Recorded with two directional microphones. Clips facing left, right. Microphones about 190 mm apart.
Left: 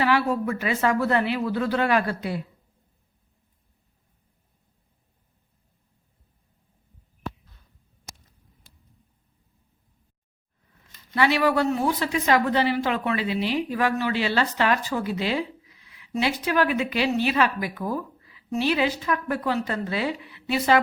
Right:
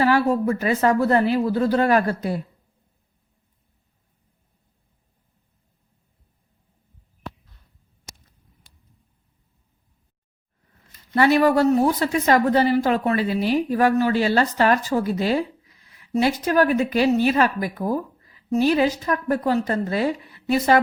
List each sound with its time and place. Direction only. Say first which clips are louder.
0.0 s a woman's voice: right 4 dB; 40° right (ahead or behind)
11.1 s a woman's voice: right 5 dB; 45° right (ahead or behind)